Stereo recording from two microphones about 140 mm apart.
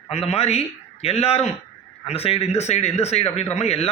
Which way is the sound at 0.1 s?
45° left (ahead or behind).